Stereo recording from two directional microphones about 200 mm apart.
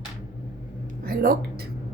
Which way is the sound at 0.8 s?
45° right (ahead or behind).